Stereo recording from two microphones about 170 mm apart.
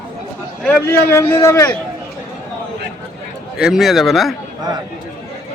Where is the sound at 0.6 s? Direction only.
10° left (ahead or behind).